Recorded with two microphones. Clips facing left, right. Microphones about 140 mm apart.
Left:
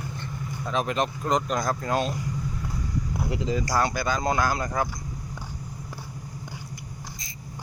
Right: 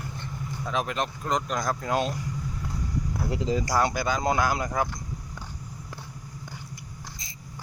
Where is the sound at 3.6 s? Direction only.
15° right (ahead or behind).